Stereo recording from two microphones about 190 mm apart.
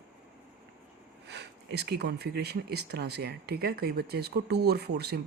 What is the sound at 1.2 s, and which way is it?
Speech, 60° right (ahead or behind).